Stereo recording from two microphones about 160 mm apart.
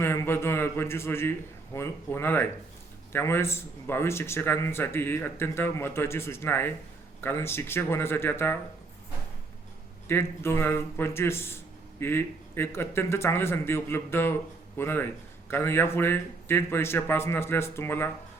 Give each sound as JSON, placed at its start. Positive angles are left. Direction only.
{"t": 0.0, "sound": "speech", "side_deg": 15}
{"t": 10.1, "sound": "speech", "side_deg": 15}